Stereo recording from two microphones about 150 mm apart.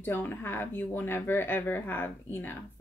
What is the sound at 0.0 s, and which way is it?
A woman's voice, 15° left (ahead or behind).